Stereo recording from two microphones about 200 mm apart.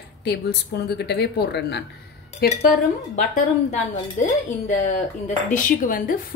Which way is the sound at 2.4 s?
45° left (ahead or behind).